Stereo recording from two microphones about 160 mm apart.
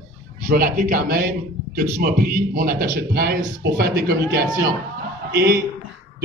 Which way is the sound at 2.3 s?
60° right (ahead or behind).